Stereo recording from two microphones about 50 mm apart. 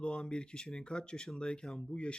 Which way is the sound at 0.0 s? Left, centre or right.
Centre.